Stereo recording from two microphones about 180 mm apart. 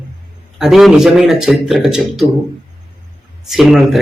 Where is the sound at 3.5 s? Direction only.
Centre (ahead or behind).